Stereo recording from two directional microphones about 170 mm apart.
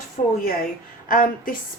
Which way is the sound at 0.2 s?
50° left (ahead or behind).